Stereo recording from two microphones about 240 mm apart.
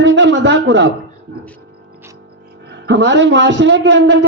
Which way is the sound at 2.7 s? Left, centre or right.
Right.